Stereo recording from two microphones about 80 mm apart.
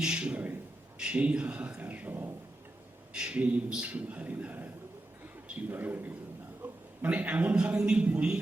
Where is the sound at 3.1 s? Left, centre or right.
Centre.